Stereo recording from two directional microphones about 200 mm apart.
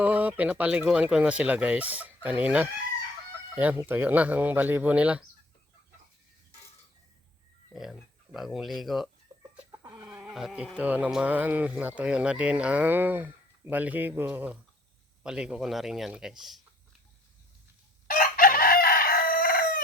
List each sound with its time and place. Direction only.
0.0 s speech: 5° right (ahead or behind)
7.7 s speech: centre (ahead or behind)
10.1 s a man's voice: 5° right (ahead or behind)
18.1 s chicken: 45° left (ahead or behind)